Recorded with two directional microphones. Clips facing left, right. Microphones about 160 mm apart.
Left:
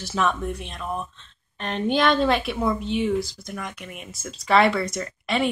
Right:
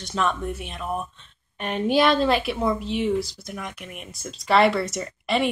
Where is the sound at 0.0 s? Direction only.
5° left (ahead or behind).